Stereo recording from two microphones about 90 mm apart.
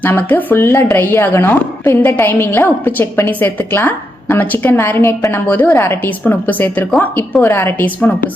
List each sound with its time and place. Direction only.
0.0 s a woman's voice: 20° left (ahead or behind)